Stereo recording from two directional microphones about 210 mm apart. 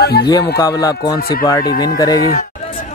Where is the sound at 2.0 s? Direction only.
20° left (ahead or behind).